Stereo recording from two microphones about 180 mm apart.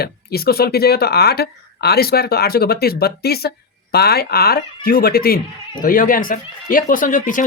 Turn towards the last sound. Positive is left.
turn(degrees=45)  # may be behind; listen again after turning